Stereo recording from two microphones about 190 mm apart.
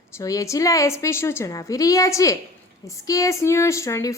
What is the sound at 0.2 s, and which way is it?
A woman's voice, 15° left (ahead or behind).